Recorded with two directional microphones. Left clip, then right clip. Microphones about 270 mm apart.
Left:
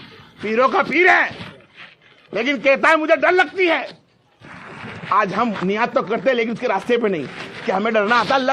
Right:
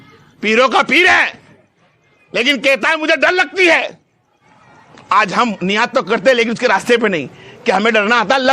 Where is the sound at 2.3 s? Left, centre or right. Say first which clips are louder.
Right 4 dB; right.